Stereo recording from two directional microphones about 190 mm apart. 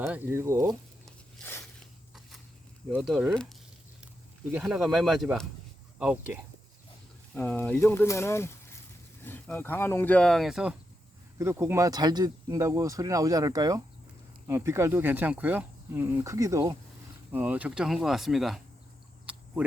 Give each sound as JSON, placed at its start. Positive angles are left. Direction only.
{"t": 0.0, "sound": "speech", "side_deg": -10}
{"t": 1.0, "sound": "a sound", "side_deg": 10}
{"t": 2.9, "sound": "speech", "side_deg": 0}
{"t": 7.3, "sound": "speech", "side_deg": 10}
{"t": 11.3, "sound": "speech", "side_deg": -15}
{"t": 19.2, "sound": "a sound", "side_deg": -5}